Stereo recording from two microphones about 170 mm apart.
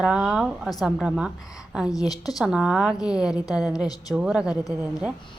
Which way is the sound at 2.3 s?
5° right (ahead or behind).